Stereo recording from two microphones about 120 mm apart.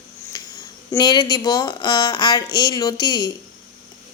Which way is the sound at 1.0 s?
35° left (ahead or behind).